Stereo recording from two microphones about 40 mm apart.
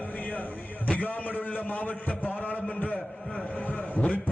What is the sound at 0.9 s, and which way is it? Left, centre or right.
A man's voice, left.